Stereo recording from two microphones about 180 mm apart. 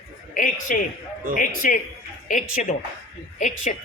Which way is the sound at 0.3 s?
50° left (ahead or behind).